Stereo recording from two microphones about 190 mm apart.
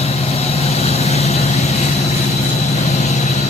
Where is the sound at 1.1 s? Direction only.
35° left (ahead or behind).